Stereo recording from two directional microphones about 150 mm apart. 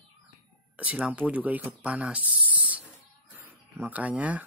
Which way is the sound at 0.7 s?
10° right (ahead or behind).